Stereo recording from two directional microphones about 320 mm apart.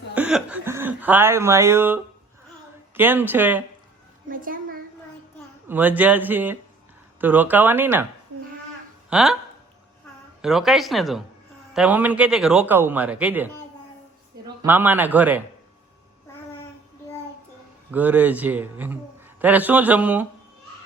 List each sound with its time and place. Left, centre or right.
0.1 s speech: centre
4.3 s a child's voice: right
5.6 s speech: centre
9.0 s speech: centre
10.4 s speech: centre
14.6 s speech: centre
17.9 s speech: centre